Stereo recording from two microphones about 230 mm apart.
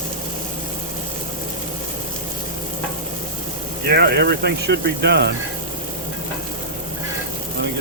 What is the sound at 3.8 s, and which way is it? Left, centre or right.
Speech, right.